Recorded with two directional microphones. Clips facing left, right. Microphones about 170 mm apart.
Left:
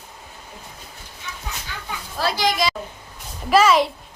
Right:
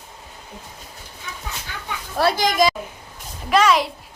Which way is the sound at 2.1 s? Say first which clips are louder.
Right 4 dB; 55° right (ahead or behind).